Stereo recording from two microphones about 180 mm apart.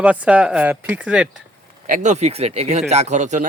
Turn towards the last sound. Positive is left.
turn(degrees=-40)  # may be behind; listen again after turning